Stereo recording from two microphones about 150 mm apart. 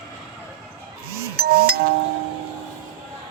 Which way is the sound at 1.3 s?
90° right.